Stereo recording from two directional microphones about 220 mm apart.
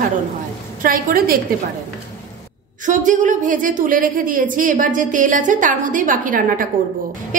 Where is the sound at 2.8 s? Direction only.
35° right (ahead or behind).